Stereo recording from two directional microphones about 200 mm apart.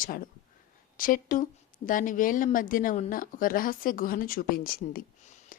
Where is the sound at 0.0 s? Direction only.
45° left (ahead or behind).